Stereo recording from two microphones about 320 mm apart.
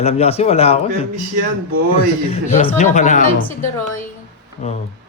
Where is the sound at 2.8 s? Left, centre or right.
Left.